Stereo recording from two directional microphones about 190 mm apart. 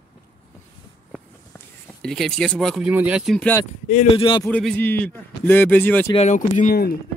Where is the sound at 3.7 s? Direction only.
40° left (ahead or behind).